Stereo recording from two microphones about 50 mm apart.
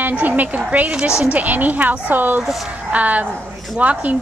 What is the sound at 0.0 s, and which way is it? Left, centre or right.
Speech, right.